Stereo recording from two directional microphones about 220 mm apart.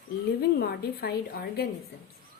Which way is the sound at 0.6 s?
45° left (ahead or behind).